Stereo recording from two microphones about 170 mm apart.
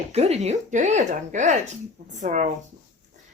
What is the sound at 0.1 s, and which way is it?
Speech, 40° right (ahead or behind).